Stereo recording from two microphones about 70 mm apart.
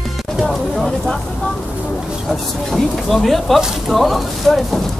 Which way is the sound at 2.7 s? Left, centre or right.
Centre.